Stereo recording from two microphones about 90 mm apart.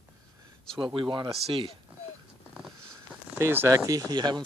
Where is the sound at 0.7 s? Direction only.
60° right (ahead or behind).